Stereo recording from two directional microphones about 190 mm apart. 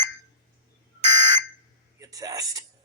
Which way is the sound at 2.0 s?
20° right (ahead or behind).